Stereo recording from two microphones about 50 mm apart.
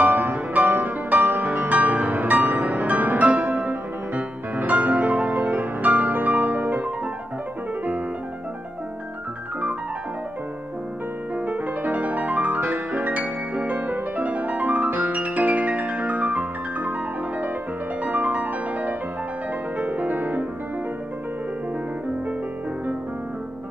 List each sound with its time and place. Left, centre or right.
0.0 s music: right
11.3 s music: right
18.0 s music: right